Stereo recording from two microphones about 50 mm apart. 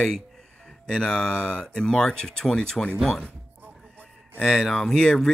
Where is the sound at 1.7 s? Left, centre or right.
Centre.